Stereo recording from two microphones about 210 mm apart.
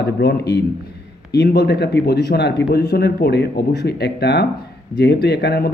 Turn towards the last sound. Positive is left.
turn(degrees=50)  # may be behind; listen again after turning